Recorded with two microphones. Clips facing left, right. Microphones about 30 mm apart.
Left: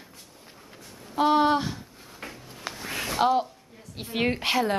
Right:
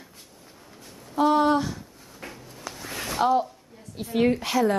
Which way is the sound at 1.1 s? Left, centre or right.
Left.